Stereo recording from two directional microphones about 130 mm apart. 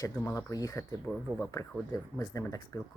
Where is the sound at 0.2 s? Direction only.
20° left (ahead or behind).